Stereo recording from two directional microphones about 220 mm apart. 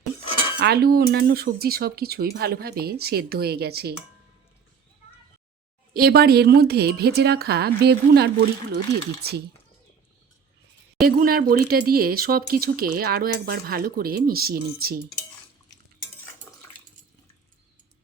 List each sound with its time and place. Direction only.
0.6 s speech: 45° right (ahead or behind)
5.9 s speech: 45° right (ahead or behind)
11.0 s speech: 40° right (ahead or behind)